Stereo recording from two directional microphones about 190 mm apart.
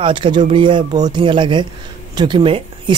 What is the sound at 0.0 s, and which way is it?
Speech, 25° right (ahead or behind).